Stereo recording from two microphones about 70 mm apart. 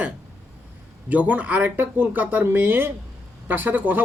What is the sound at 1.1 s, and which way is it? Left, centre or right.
Speech, right.